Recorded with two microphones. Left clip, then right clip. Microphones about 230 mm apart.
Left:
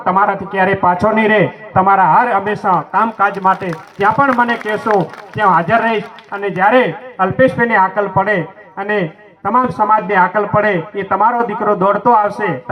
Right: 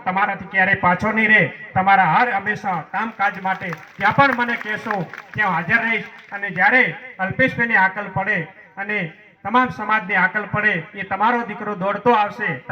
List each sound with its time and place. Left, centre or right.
0.0 s a man's voice: right